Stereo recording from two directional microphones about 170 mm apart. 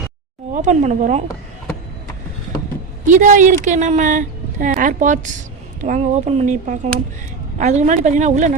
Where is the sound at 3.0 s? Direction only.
50° right (ahead or behind).